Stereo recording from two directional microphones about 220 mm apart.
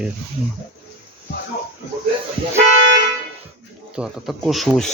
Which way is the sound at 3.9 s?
5° right (ahead or behind).